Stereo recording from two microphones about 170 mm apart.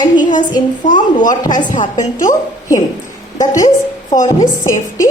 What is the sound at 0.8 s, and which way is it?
Speech, 45° left (ahead or behind).